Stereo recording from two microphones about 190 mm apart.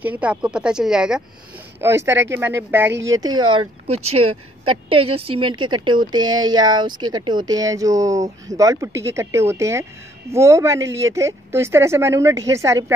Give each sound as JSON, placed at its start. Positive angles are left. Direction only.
{"t": 0.0, "sound": "speech", "side_deg": -10}
{"t": 1.8, "sound": "a woman's voice", "side_deg": -15}
{"t": 3.5, "sound": "a woman's voice", "side_deg": -30}